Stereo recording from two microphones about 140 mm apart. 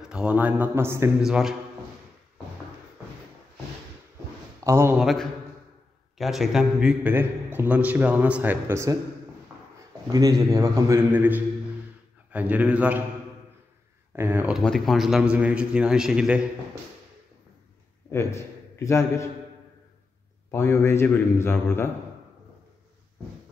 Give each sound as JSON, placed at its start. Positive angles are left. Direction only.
{"t": 0.0, "sound": "a man's voice", "side_deg": -5}
{"t": 1.2, "sound": "speech", "side_deg": -5}
{"t": 4.6, "sound": "a man's voice", "side_deg": -20}
{"t": 4.9, "sound": "a man's voice", "side_deg": 0}
{"t": 10.1, "sound": "a man's voice", "side_deg": -25}
{"t": 14.1, "sound": "a man's voice", "side_deg": -15}
{"t": 14.5, "sound": "speech", "side_deg": 0}
{"t": 18.1, "sound": "a man's voice", "side_deg": 20}
{"t": 20.5, "sound": "a man's voice", "side_deg": 20}